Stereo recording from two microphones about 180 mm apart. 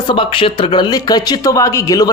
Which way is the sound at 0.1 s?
30° left (ahead or behind).